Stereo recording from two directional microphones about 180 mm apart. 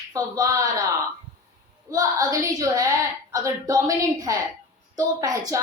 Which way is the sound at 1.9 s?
20° right (ahead or behind).